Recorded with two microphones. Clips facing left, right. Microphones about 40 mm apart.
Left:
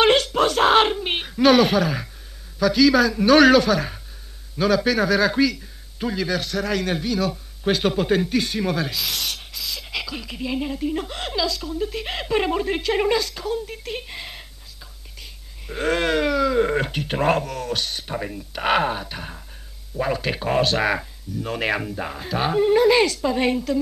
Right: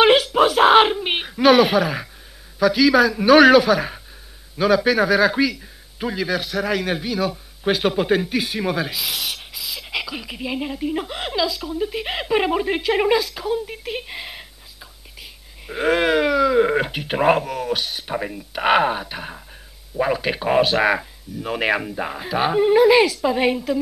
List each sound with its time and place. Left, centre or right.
0.0 s a sound: centre
2.6 s a man's voice: centre
15.6 s a man's voice: centre